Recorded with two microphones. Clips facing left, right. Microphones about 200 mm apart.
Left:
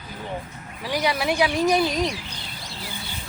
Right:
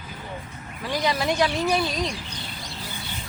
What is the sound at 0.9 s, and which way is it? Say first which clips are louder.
Speech: left 1 dB; 10° left (ahead or behind).